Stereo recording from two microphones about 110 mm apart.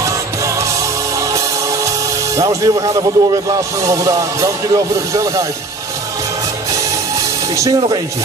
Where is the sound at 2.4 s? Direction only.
30° right (ahead or behind).